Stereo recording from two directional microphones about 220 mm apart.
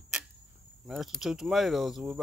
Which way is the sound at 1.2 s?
Centre (ahead or behind).